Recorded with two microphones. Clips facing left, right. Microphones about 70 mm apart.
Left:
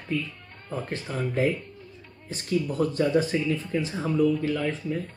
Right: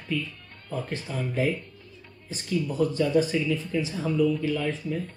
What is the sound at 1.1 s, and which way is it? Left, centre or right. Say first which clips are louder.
Speech: left 2 dB; left.